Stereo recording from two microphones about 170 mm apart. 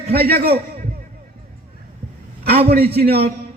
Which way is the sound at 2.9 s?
70° right (ahead or behind).